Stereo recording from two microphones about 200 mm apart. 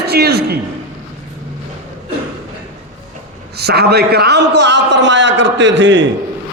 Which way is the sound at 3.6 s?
55° right (ahead or behind).